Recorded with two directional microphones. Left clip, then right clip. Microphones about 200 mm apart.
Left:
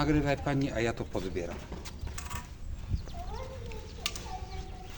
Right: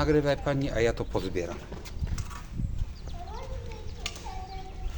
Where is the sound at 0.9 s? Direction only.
40° right (ahead or behind).